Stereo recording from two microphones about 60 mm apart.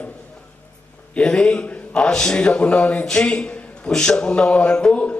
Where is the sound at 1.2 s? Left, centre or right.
Centre.